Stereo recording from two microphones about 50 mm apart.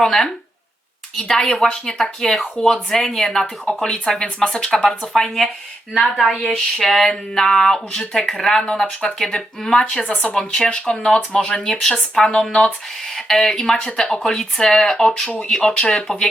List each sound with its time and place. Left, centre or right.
0.0 s speech: centre
10.0 s speech: left
10.3 s speech: centre